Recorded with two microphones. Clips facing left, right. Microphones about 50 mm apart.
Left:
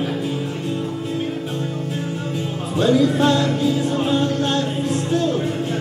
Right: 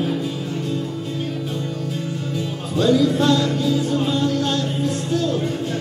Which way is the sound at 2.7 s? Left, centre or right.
Left.